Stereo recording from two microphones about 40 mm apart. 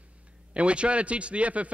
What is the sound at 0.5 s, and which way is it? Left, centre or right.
A man's voice, right.